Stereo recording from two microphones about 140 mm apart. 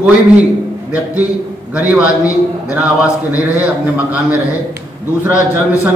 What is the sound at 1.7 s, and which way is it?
A man's voice, 10° right (ahead or behind).